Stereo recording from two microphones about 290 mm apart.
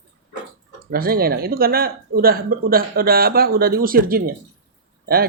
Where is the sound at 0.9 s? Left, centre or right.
Right.